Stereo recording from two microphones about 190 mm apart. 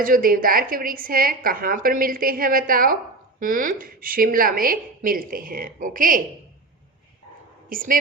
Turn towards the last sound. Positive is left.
turn(degrees=-45)  # may be behind; listen again after turning